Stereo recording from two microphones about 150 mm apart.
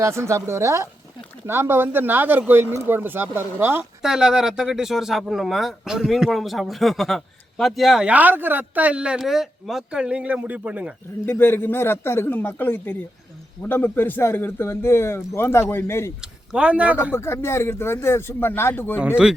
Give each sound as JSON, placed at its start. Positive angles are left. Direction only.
{"t": 0.0, "sound": "a woman's voice", "side_deg": -20}
{"t": 4.0, "sound": "speech", "side_deg": -5}
{"t": 11.3, "sound": "a man's voice", "side_deg": 15}
{"t": 16.2, "sound": "a man's voice", "side_deg": -5}
{"t": 17.1, "sound": "a man's voice", "side_deg": 15}
{"t": 18.9, "sound": "speech", "side_deg": -5}